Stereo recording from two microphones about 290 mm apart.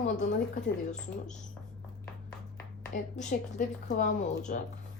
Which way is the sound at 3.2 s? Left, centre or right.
Left.